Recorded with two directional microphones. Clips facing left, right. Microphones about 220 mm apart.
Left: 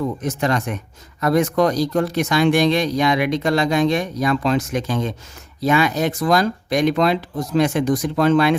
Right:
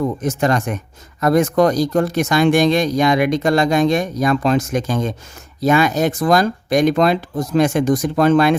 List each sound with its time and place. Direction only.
0.2 s speech: 45° right (ahead or behind)